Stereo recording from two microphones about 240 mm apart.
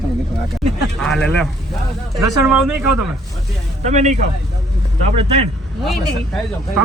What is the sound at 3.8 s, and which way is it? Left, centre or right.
Speech, right.